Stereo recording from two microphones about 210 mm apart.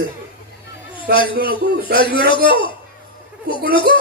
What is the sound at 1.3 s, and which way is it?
A man's voice, 45° right (ahead or behind).